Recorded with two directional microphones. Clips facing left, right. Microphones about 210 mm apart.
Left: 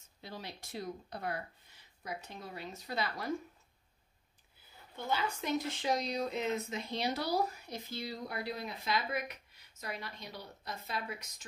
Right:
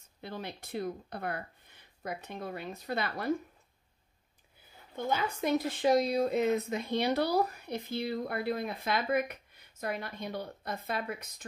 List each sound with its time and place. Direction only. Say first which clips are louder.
0.2 s speech: right 5 dB; 55° right (ahead or behind)
4.9 s speech: right 3 dB; 50° right (ahead or behind)